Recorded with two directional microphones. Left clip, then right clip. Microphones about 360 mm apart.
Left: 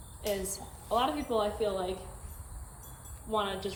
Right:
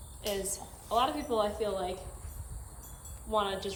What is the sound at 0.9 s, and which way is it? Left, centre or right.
A woman's voice, centre.